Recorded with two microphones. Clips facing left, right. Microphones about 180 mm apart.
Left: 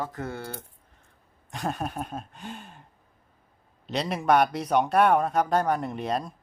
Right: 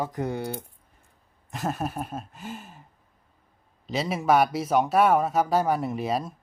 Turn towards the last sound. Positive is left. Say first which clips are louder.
# right 2 dB
turn(degrees=-5)  # may be behind; listen again after turning